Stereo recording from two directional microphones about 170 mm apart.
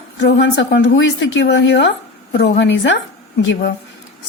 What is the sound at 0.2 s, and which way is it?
Speech, 90° left.